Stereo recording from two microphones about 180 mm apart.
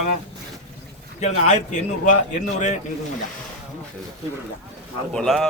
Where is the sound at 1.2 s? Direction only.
40° left (ahead or behind).